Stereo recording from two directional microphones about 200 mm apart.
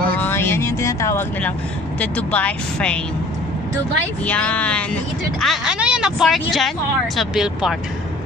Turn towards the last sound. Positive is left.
turn(degrees=-5)  # may be behind; listen again after turning